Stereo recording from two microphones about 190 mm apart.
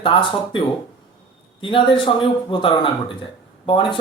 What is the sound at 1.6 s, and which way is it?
Speech, 25° left (ahead or behind).